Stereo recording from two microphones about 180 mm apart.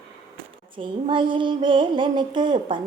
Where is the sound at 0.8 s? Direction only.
30° right (ahead or behind).